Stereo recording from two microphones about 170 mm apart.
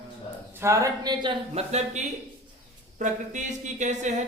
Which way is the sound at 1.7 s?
45° right (ahead or behind).